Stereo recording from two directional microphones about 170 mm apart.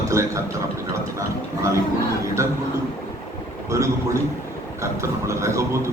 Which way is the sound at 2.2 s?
15° right (ahead or behind).